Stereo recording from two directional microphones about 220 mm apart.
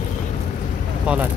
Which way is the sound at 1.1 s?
5° right (ahead or behind).